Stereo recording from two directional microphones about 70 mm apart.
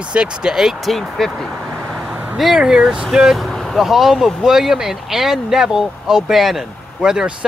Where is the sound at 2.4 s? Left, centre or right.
Centre.